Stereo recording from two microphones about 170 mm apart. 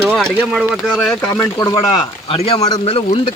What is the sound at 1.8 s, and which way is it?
Speech, 35° left (ahead or behind).